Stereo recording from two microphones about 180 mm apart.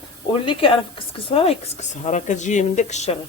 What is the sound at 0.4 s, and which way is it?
Speech, 30° left (ahead or behind).